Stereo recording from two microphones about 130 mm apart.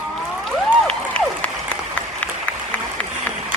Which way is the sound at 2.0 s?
10° left (ahead or behind).